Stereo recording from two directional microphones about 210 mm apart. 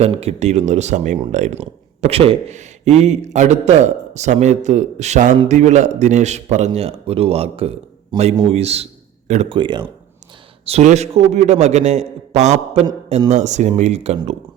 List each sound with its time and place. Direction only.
0.0 s a man's voice: 30° right (ahead or behind)